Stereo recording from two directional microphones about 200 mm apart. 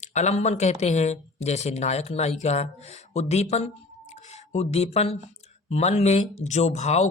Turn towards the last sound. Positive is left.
turn(degrees=35)  # may be behind; listen again after turning